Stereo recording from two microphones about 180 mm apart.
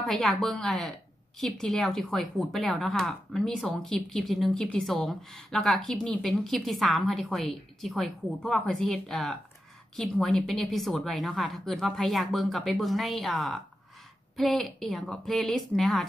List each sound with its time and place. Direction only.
0.0 s a woman's voice: centre (ahead or behind)